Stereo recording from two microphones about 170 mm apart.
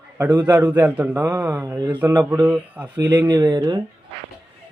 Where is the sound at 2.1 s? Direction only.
10° right (ahead or behind).